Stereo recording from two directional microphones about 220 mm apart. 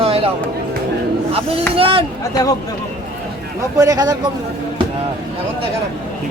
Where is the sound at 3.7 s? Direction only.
15° right (ahead or behind).